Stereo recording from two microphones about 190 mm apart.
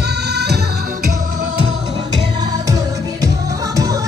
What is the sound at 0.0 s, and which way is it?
Music, 60° right (ahead or behind).